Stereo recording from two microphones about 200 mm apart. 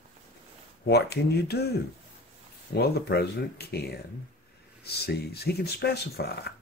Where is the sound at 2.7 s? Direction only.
55° left (ahead or behind).